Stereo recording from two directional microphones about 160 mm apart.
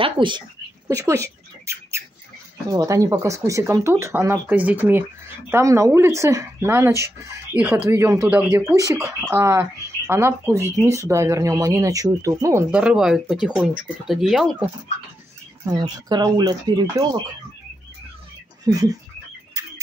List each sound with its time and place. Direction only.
0.0 s speech: 30° right (ahead or behind)
0.8 s rodents: 20° right (ahead or behind)
2.7 s speech: 20° right (ahead or behind)
8.6 s speech: 20° right (ahead or behind)
12.7 s speech: 5° right (ahead or behind)
15.6 s speech: 25° right (ahead or behind)
18.7 s speech: 20° right (ahead or behind)